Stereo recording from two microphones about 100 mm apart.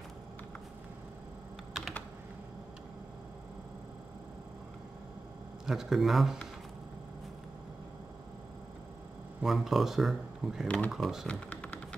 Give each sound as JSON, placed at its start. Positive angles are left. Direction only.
{"t": 1.7, "sound": "typing", "side_deg": 0}
{"t": 5.7, "sound": "speech", "side_deg": -5}
{"t": 9.4, "sound": "speech", "side_deg": 0}
{"t": 11.2, "sound": "typing", "side_deg": 15}